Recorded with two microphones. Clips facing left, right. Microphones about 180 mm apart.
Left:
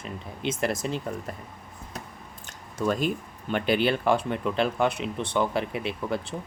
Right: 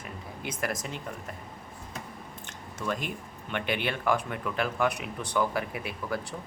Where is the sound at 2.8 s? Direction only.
40° left (ahead or behind).